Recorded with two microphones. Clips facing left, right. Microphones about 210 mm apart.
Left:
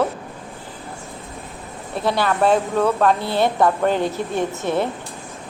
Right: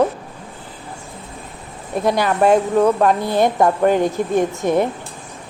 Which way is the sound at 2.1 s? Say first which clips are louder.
Right 2 dB; 15° right (ahead or behind).